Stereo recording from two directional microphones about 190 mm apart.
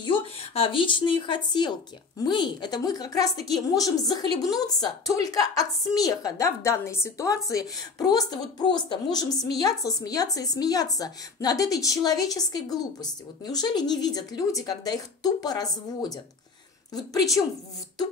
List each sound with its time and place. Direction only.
0.6 s a woman's voice: 25° left (ahead or behind)